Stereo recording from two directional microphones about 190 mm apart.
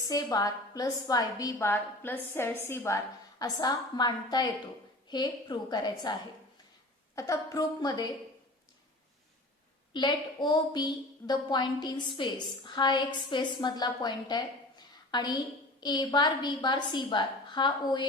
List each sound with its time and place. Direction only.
0.1 s a woman's voice: 20° left (ahead or behind)
7.2 s a woman's voice: 15° left (ahead or behind)
9.9 s a woman's voice: 25° left (ahead or behind)